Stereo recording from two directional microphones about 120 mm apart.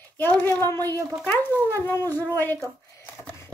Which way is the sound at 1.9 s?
20° left (ahead or behind).